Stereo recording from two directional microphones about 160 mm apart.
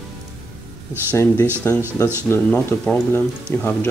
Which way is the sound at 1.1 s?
15° left (ahead or behind).